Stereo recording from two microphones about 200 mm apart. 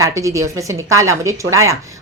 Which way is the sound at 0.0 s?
15° right (ahead or behind).